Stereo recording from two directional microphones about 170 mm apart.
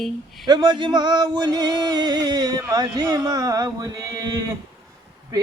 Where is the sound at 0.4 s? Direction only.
25° right (ahead or behind).